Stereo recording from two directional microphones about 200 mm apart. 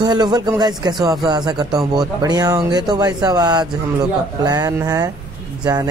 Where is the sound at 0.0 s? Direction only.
20° right (ahead or behind).